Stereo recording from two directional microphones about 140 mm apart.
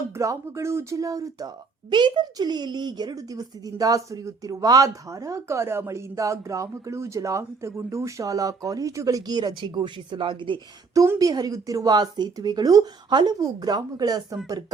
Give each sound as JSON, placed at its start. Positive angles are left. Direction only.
{"t": 0.1, "sound": "speech", "side_deg": -20}
{"t": 11.0, "sound": "speech", "side_deg": -20}